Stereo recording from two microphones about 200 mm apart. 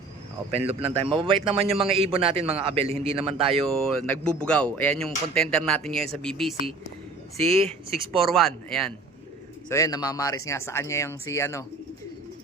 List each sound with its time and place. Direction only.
0.5 s a man's voice: 30° right (ahead or behind)
3.7 s speech: 5° left (ahead or behind)
7.4 s a man's voice: 30° right (ahead or behind)
8.2 s speech: centre (ahead or behind)
9.6 s speech: 15° left (ahead or behind)